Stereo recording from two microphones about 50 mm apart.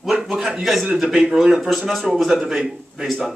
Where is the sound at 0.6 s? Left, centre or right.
Centre.